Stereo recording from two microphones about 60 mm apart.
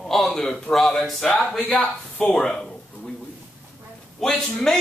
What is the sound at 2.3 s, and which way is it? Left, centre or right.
Speech, centre.